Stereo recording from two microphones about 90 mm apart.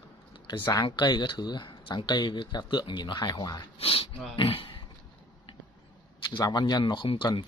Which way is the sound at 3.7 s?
90° left.